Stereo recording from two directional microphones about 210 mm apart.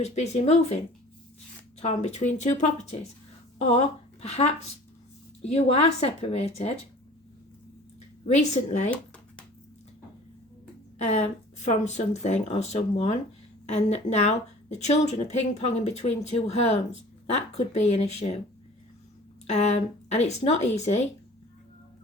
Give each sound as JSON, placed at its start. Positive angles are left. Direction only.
{"t": 0.0, "sound": "a woman's voice", "side_deg": 30}
{"t": 1.8, "sound": "a woman's voice", "side_deg": 30}
{"t": 8.3, "sound": "a woman's voice", "side_deg": 35}
{"t": 10.9, "sound": "a woman's voice", "side_deg": 35}
{"t": 19.5, "sound": "a woman's voice", "side_deg": 30}